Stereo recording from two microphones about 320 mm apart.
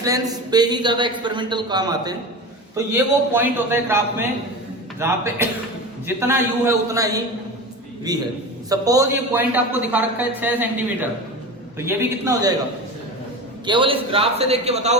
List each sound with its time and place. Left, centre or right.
0.0 s a man's voice: centre
13.7 s a man's voice: centre